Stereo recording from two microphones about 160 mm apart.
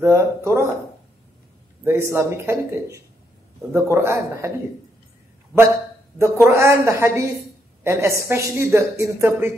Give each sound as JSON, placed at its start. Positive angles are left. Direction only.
{"t": 0.0, "sound": "a woman's voice", "side_deg": -15}
{"t": 1.9, "sound": "a woman's voice", "side_deg": -15}
{"t": 6.1, "sound": "a woman's voice", "side_deg": -15}